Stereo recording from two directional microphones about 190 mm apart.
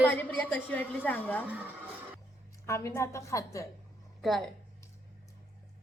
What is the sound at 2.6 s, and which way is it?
A woman's voice, 15° left (ahead or behind).